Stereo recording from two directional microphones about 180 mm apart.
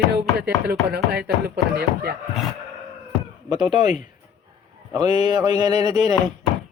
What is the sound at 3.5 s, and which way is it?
Chopping, 25° right (ahead or behind).